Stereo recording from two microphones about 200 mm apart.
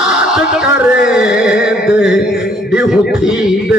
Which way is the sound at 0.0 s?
5° right (ahead or behind).